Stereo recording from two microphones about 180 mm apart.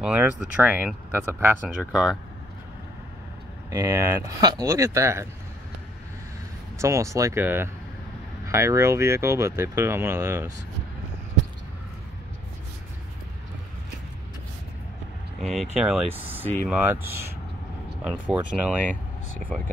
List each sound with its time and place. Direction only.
0.0 s speech: 5° right (ahead or behind)
3.7 s speech: 20° right (ahead or behind)
6.8 s speech: 15° right (ahead or behind)
15.4 s speech: centre (ahead or behind)
18.2 s speech: 5° right (ahead or behind)